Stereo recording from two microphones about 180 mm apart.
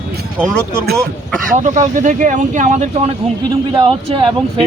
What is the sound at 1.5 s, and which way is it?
Speech, 45° right (ahead or behind).